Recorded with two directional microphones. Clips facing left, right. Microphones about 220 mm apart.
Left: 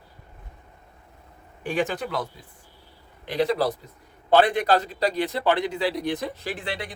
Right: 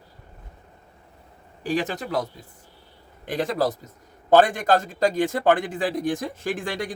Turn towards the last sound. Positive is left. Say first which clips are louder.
# right 4 dB
turn(degrees=-45)  # may be behind; listen again after turning